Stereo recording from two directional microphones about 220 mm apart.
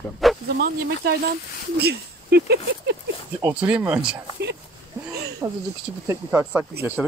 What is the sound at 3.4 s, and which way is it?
Speech, 10° right (ahead or behind).